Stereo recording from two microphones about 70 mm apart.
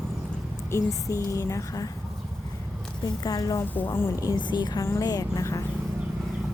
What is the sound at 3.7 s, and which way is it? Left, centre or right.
Speech, left.